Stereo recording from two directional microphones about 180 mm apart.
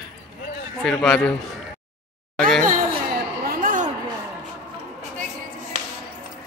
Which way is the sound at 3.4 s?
50° right (ahead or behind).